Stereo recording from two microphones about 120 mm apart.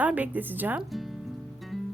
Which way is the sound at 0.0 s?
15° right (ahead or behind).